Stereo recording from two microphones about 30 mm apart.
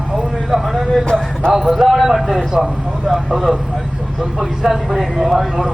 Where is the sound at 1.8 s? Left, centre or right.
Centre.